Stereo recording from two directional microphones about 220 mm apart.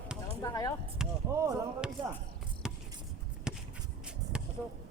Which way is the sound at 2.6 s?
5° right (ahead or behind).